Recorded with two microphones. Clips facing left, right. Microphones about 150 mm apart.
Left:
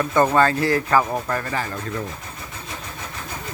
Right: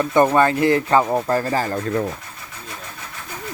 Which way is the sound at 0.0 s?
20° right (ahead or behind).